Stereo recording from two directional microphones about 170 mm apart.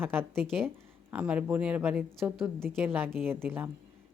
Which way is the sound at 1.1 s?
10° right (ahead or behind).